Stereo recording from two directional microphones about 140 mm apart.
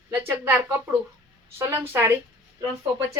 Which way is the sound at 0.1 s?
15° right (ahead or behind).